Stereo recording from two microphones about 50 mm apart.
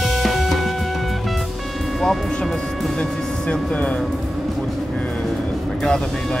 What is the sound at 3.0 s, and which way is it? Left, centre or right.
Speech, left.